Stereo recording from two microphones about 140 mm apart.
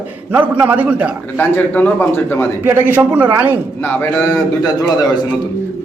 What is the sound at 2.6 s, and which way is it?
A man's voice, 15° right (ahead or behind).